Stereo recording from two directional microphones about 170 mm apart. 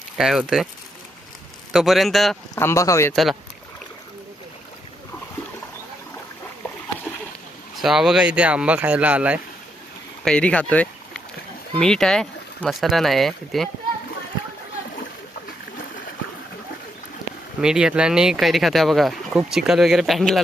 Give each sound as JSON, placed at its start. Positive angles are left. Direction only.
{"t": 0.2, "sound": "speech", "side_deg": -5}
{"t": 1.7, "sound": "speech", "side_deg": 0}
{"t": 2.6, "sound": "speech", "side_deg": 15}
{"t": 7.8, "sound": "speech", "side_deg": 0}
{"t": 10.2, "sound": "speech", "side_deg": 5}
{"t": 17.6, "sound": "speech", "side_deg": -5}